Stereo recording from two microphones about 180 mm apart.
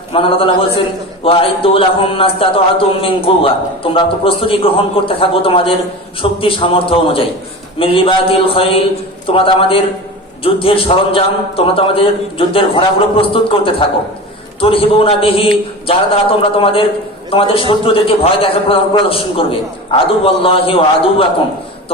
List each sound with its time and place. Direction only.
0.1 s a man's voice: 30° left (ahead or behind)